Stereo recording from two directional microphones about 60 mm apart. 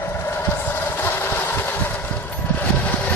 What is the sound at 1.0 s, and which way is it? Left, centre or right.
Vehicle, left.